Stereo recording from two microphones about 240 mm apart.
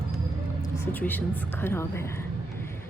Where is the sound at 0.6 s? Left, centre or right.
Centre.